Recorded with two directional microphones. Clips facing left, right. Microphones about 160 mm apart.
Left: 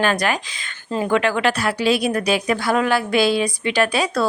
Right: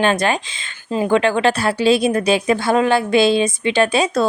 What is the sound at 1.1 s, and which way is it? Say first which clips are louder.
Speech: right 3 dB; 25° right (ahead or behind).